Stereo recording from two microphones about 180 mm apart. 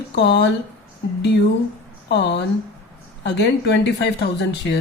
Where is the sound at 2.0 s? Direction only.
70° left (ahead or behind).